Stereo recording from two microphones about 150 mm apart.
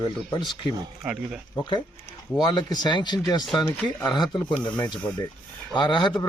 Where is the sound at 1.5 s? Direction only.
30° left (ahead or behind).